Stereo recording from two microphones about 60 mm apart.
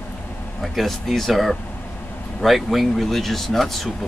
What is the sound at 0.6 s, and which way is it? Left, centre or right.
Speech, centre.